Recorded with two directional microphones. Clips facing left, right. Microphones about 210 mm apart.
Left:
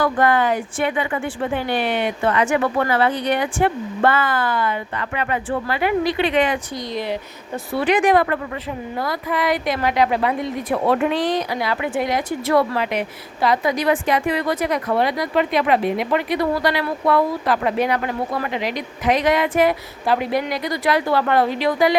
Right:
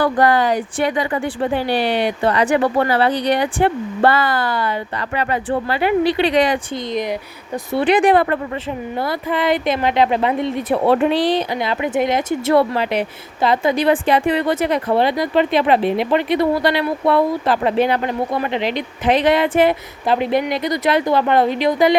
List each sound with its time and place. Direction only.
0.0 s speech: 35° right (ahead or behind)
6.9 s a woman's voice: 15° right (ahead or behind)
7.7 s a woman's voice: 30° right (ahead or behind)